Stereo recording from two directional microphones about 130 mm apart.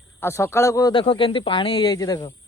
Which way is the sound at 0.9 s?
40° left (ahead or behind).